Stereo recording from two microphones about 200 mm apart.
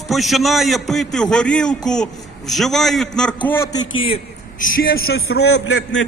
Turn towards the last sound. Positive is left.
turn(degrees=65)  # may be behind; listen again after turning